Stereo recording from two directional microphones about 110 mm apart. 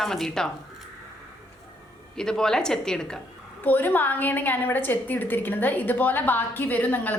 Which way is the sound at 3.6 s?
15° left (ahead or behind).